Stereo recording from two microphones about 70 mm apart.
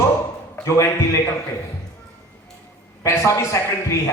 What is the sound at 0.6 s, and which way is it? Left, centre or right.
Speech, left.